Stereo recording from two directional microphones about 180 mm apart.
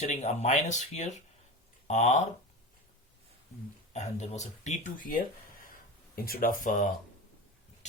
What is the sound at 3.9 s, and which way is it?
Speech, 40° left (ahead or behind).